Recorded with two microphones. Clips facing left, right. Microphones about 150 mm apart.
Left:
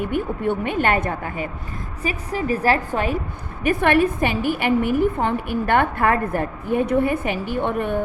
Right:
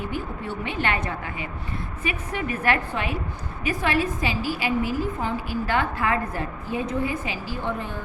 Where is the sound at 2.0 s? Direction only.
35° left (ahead or behind).